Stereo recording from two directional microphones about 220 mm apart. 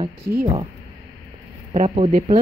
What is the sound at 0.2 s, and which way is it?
Speech, 45° right (ahead or behind).